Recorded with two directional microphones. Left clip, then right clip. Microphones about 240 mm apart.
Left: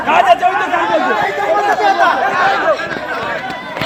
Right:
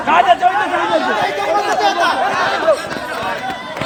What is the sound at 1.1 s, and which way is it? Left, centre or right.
Chatter, right.